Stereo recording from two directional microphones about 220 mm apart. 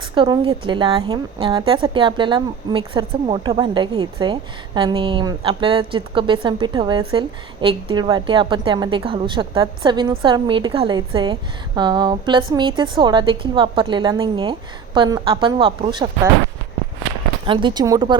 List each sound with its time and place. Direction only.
0.1 s a woman's voice: 25° right (ahead or behind)
17.4 s a woman's voice: 20° right (ahead or behind)